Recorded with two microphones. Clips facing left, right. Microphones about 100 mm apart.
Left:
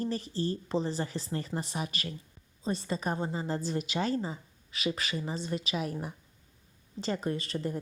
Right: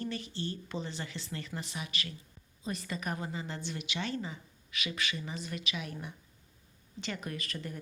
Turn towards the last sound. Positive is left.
turn(degrees=30)  # may be behind; listen again after turning